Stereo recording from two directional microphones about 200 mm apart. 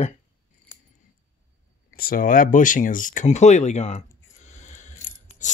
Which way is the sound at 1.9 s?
45° left (ahead or behind).